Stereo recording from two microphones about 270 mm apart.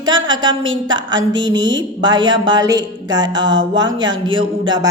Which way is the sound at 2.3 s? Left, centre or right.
Centre.